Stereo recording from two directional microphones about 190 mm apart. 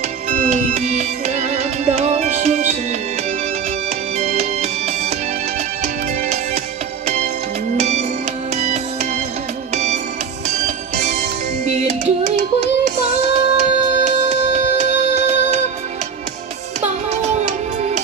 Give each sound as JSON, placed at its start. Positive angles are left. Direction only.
{"t": 0.3, "sound": "music", "side_deg": -45}
{"t": 4.2, "sound": "music", "side_deg": -35}
{"t": 11.0, "sound": "music", "side_deg": -35}
{"t": 17.1, "sound": "music", "side_deg": -35}